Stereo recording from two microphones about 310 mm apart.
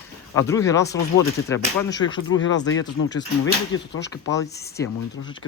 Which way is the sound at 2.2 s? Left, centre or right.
Left.